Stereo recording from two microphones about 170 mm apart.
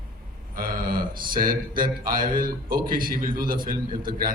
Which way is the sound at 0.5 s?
55° right (ahead or behind).